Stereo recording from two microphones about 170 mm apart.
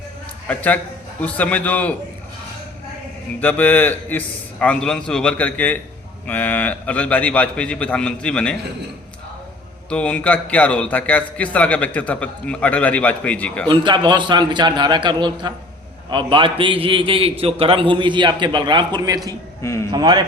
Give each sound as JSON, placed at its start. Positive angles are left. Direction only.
{"t": 0.4, "sound": "a man's voice", "side_deg": 10}
{"t": 3.4, "sound": "a man's voice", "side_deg": 10}
{"t": 9.9, "sound": "a man's voice", "side_deg": 5}
{"t": 13.7, "sound": "a man's voice", "side_deg": -30}
{"t": 19.6, "sound": "a man's voice", "side_deg": 15}
{"t": 19.9, "sound": "a man's voice", "side_deg": -25}